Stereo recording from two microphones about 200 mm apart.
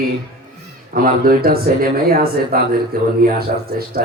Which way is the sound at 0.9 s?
45° right (ahead or behind).